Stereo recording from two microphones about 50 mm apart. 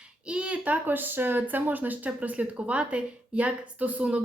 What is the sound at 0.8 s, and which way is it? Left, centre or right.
A woman's voice, right.